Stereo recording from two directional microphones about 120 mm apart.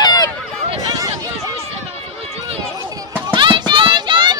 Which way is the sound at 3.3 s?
40° right (ahead or behind).